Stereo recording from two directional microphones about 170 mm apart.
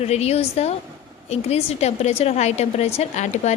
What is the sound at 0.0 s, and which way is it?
A woman's voice, 40° left (ahead or behind).